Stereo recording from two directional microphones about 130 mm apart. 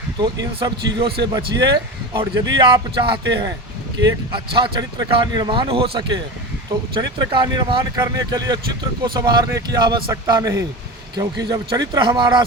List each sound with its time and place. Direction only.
0.3 s speech: 35° right (ahead or behind)